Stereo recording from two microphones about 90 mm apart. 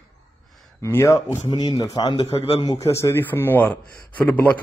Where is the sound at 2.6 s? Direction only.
40° left (ahead or behind).